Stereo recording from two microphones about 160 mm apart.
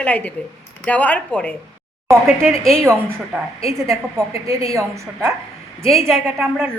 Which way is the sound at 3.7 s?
20° right (ahead or behind).